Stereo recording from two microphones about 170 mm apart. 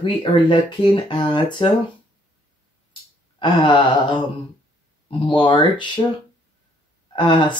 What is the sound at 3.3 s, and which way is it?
Speech, 30° left (ahead or behind).